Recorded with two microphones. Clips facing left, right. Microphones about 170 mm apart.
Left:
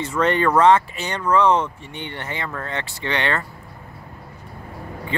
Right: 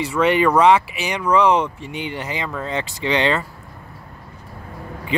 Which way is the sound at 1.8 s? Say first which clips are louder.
Right 5 dB; 90° right.